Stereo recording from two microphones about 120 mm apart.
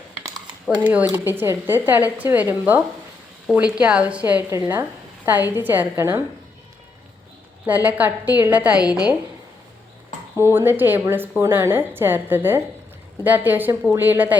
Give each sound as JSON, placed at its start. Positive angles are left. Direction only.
{"t": 0.8, "sound": "speech", "side_deg": -15}
{"t": 7.7, "sound": "speech", "side_deg": -15}
{"t": 10.3, "sound": "speech", "side_deg": -20}